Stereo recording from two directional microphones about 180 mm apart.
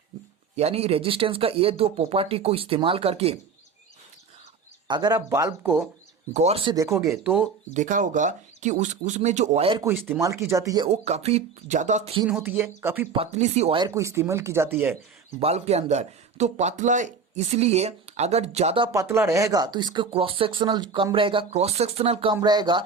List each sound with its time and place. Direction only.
0.5 s speech: 35° right (ahead or behind)
4.9 s speech: 25° right (ahead or behind)
6.3 s speech: 35° right (ahead or behind)
6.7 s speech: 15° right (ahead or behind)
7.7 s speech: 45° right (ahead or behind)
9.8 s speech: 15° right (ahead or behind)
10.8 s speech: 35° right (ahead or behind)
12.3 s speech: 10° right (ahead or behind)
13.1 s speech: 40° right (ahead or behind)
13.7 s speech: 20° right (ahead or behind)
15.4 s speech: 35° right (ahead or behind)
18.9 s speech: 15° right (ahead or behind)